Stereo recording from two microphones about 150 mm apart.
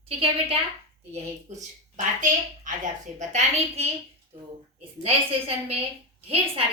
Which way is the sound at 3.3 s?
50° right (ahead or behind).